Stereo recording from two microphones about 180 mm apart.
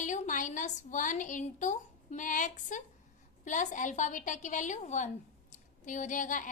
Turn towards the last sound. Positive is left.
turn(degrees=45)  # may be behind; listen again after turning